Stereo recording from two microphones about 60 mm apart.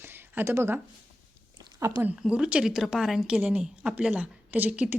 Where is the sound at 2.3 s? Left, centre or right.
Centre.